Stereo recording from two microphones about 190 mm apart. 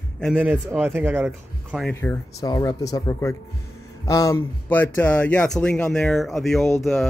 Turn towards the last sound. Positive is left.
turn(degrees=0)  # may be behind; listen again after turning